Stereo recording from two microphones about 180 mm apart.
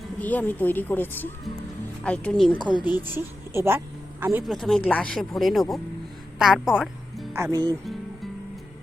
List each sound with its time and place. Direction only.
0.2 s a woman's voice: 10° left (ahead or behind)
2.6 s speech: 25° right (ahead or behind)
3.0 s speech: 15° right (ahead or behind)
4.4 s a woman's voice: centre (ahead or behind)
7.3 s speech: 20° right (ahead or behind)